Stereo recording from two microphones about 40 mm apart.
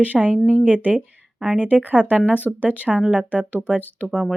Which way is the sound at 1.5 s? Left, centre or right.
Right.